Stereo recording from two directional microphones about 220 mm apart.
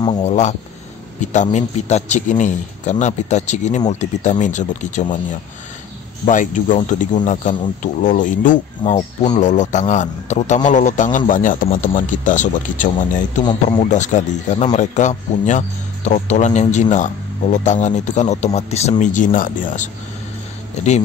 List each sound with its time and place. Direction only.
0.0 s speech: 25° left (ahead or behind)
6.2 s speech: 35° left (ahead or behind)
13.4 s speech: 20° left (ahead or behind)
13.8 s speech: 35° left (ahead or behind)